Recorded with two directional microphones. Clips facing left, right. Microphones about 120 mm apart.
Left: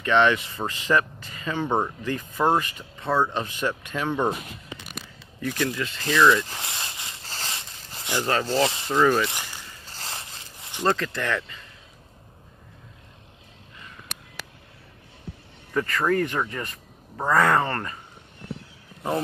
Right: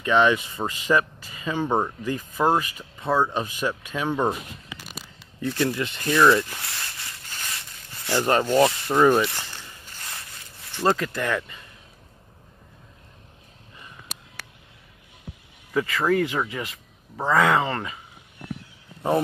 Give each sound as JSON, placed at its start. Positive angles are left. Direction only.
{"t": 0.0, "sound": "speech", "side_deg": -15}
{"t": 5.6, "sound": "speech", "side_deg": -20}
{"t": 6.4, "sound": "a sound", "side_deg": 20}
{"t": 8.2, "sound": "speech", "side_deg": -20}
{"t": 8.6, "sound": "speech", "side_deg": 20}
{"t": 8.9, "sound": "speech", "side_deg": -20}
{"t": 9.3, "sound": "a sound", "side_deg": 15}
{"t": 9.8, "sound": "a sound", "side_deg": 25}
{"t": 10.8, "sound": "speech", "side_deg": -10}
{"t": 15.7, "sound": "speech", "side_deg": -5}
{"t": 19.0, "sound": "speech", "side_deg": -25}